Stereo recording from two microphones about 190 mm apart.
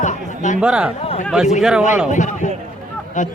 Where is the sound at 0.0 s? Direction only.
40° left (ahead or behind).